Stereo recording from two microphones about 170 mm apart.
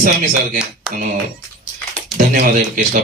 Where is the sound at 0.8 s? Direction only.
5° right (ahead or behind).